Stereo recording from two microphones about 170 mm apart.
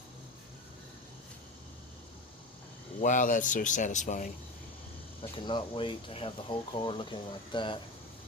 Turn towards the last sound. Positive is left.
turn(degrees=30)  # may be behind; listen again after turning